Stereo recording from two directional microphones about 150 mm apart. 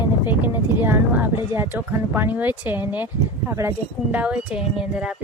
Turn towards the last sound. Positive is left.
turn(degrees=-5)  # may be behind; listen again after turning